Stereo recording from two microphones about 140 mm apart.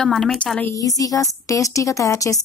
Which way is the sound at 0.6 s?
20° left (ahead or behind).